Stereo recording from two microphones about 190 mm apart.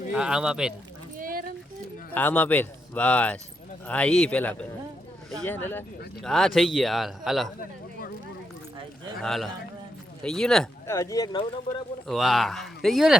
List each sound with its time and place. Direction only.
0.1 s speech: 5° right (ahead or behind)
1.1 s a sound: 50° right (ahead or behind)
2.1 s a man's voice: 10° left (ahead or behind)
9.2 s speech: centre (ahead or behind)
10.8 s a man's voice: 15° left (ahead or behind)
12.0 s speech: centre (ahead or behind)